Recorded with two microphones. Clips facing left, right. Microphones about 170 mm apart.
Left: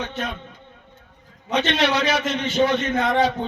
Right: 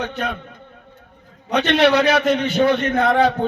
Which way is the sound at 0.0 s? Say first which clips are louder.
Right 4 dB; 60° right (ahead or behind).